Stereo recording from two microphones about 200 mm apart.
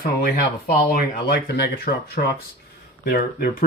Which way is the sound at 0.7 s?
50° left (ahead or behind).